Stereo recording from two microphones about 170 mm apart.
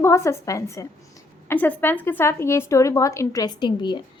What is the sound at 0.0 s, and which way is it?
A woman's voice, 15° left (ahead or behind).